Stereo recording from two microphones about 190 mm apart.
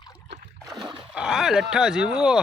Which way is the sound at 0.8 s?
25° right (ahead or behind).